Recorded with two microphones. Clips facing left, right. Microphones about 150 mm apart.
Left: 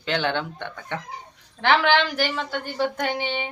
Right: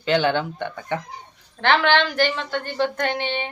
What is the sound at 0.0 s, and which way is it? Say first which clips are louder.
Speech: right 5 dB; 5° right (ahead or behind).